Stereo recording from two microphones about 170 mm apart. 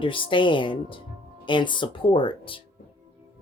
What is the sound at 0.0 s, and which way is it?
Speech, 30° left (ahead or behind).